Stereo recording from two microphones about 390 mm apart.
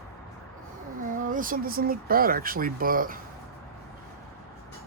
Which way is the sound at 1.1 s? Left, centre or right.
Centre.